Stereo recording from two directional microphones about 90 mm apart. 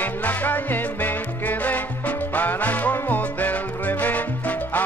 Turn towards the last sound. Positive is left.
turn(degrees=20)  # may be behind; listen again after turning